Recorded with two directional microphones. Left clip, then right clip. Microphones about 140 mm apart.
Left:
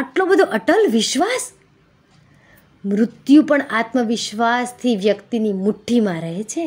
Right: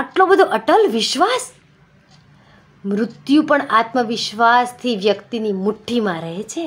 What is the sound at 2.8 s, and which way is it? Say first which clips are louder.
Speech: left 3 dB; 50° left (ahead or behind).